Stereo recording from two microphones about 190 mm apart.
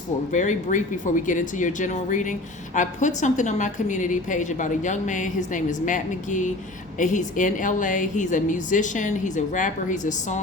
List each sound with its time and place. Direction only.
0.3 s a woman's voice: 40° left (ahead or behind)